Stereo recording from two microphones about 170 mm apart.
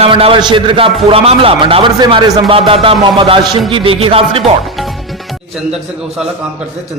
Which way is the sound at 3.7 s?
30° right (ahead or behind).